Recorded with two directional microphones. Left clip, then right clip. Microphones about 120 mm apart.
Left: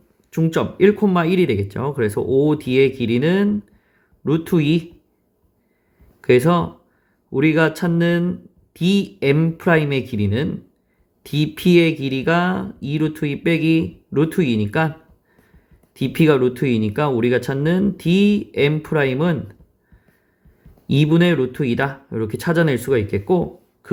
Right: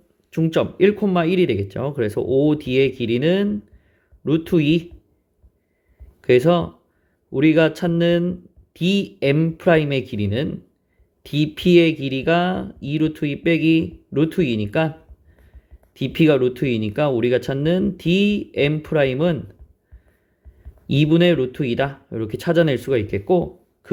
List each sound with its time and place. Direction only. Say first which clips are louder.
0.3 s speech: right 1 dB; 30° right (ahead or behind)
6.2 s speech: even; 25° right (ahead or behind)
16.0 s speech: left 1 dB; 25° right (ahead or behind)
20.8 s speech: right 1 dB; 25° right (ahead or behind)